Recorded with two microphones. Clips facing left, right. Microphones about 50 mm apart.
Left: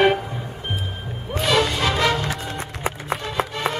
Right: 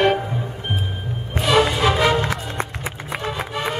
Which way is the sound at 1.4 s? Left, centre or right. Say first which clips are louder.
Right 3 dB; centre.